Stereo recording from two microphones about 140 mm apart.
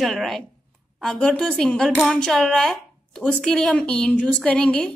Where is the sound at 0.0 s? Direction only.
Centre (ahead or behind).